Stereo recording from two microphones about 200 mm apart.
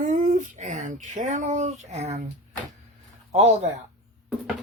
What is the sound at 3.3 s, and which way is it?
Speech, 30° right (ahead or behind).